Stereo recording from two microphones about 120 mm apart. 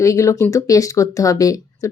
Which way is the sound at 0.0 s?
25° left (ahead or behind).